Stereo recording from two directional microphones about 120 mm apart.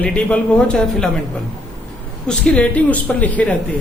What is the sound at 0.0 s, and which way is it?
Speech, 10° left (ahead or behind).